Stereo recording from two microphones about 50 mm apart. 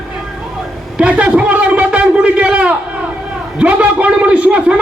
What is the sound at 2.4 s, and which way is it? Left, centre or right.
Crowd, right.